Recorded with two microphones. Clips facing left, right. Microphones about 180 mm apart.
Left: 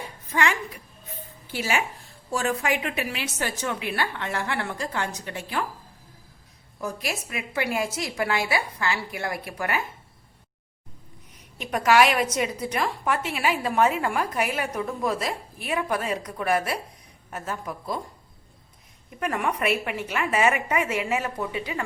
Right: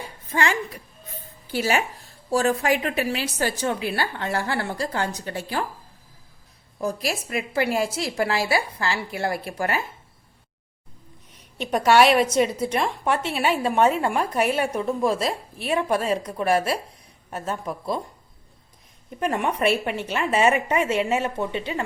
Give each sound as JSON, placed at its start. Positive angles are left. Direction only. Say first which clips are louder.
{"t": 0.3, "sound": "a woman's voice", "louder": "right 1 dB", "side_deg": -30}
{"t": 1.5, "sound": "a woman's voice", "louder": "right 4 dB", "side_deg": -40}
{"t": 6.7, "sound": "a woman's voice", "louder": "right 4 dB", "side_deg": -35}
{"t": 11.6, "sound": "a woman's voice", "louder": "right 3 dB", "side_deg": -30}
{"t": 19.2, "sound": "a woman's voice", "louder": "right 3 dB", "side_deg": -30}